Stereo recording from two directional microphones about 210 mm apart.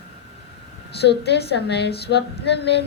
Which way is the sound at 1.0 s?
50° left (ahead or behind).